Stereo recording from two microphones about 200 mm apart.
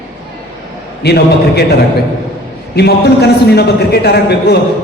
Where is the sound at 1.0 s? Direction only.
55° left (ahead or behind).